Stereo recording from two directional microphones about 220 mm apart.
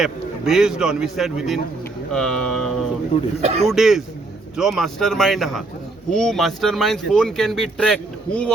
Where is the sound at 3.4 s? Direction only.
30° right (ahead or behind).